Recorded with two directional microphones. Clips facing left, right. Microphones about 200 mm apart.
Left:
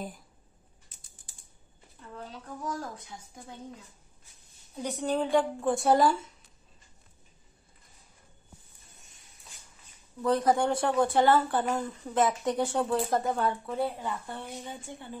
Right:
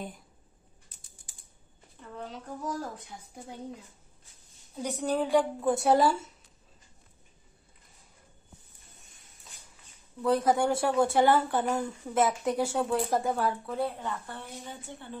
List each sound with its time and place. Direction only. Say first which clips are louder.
4.7 s a woman's voice: even; 10° right (ahead or behind)
10.2 s a woman's voice: even; 5° right (ahead or behind); by 15.1 s 15° left (ahead or behind)